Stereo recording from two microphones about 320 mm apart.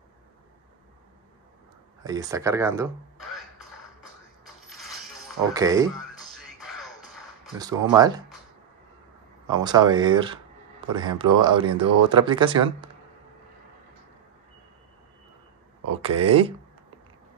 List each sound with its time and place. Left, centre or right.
2.0 s speech: centre
4.6 s mechanisms: centre
5.5 s speech: centre
5.9 s music: centre
7.5 s speech: centre
9.5 s speech: centre
15.9 s speech: centre